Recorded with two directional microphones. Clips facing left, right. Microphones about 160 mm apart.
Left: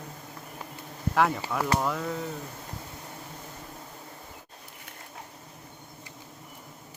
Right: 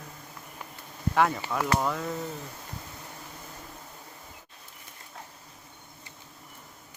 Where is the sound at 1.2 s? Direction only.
Centre (ahead or behind).